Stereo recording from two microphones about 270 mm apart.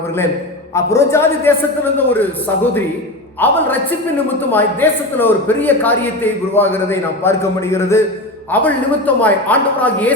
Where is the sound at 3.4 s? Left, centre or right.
Centre.